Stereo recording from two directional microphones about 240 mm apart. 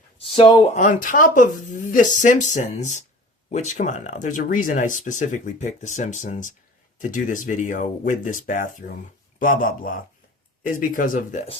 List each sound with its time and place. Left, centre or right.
0.2 s speech: left
0.8 s speech: left